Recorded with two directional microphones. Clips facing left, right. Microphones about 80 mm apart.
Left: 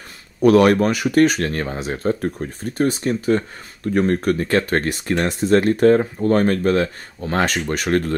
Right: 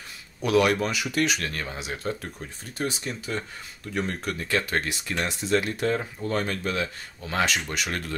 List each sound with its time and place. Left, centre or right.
0.4 s speech: left